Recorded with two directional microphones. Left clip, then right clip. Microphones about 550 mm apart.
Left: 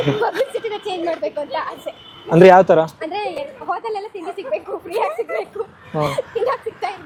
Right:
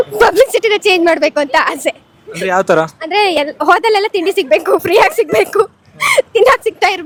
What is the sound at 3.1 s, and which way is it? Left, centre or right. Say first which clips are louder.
A woman's voice: right 12 dB; right.